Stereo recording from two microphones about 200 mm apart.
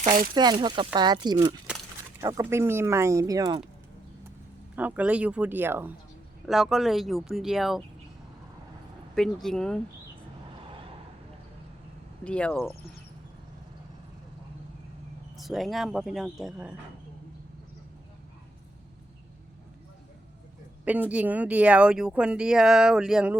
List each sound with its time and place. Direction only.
0.3 s speech: 20° right (ahead or behind)
4.7 s speech: 10° right (ahead or behind)
9.1 s speech: centre (ahead or behind)
12.2 s speech: 5° left (ahead or behind)
15.4 s speech: centre (ahead or behind)
20.8 s speech: 5° right (ahead or behind)